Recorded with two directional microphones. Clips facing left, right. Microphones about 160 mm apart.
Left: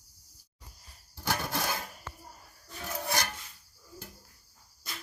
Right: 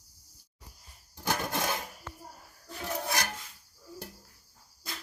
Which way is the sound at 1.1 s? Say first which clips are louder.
Right 1 dB; 20° right (ahead or behind).